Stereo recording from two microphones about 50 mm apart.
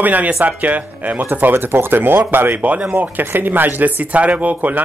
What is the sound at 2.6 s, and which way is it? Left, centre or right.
Speech, right.